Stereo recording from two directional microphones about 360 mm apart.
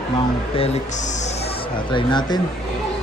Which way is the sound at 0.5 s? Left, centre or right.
Centre.